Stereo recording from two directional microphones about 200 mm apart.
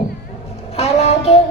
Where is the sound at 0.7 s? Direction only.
30° left (ahead or behind).